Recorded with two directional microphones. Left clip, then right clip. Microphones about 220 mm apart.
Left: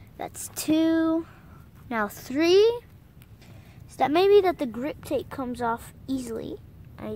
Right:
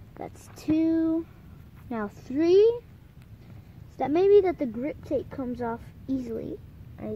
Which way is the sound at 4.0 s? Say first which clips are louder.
Left 1 dB; centre (ahead or behind).